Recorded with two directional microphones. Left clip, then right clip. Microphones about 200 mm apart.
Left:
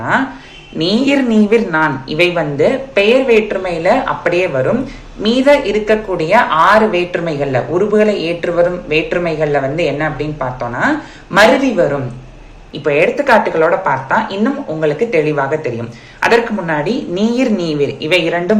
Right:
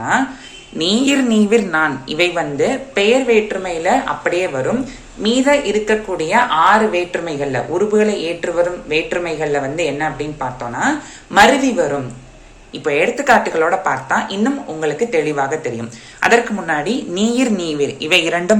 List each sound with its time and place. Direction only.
0.8 s speech: 15° right (ahead or behind)